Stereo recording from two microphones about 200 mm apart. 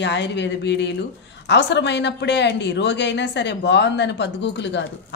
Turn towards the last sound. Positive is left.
turn(degrees=60)  # may be behind; listen again after turning